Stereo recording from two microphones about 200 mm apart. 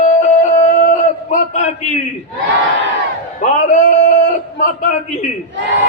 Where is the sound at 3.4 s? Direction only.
35° left (ahead or behind).